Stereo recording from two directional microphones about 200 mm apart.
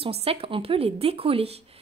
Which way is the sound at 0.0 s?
30° right (ahead or behind).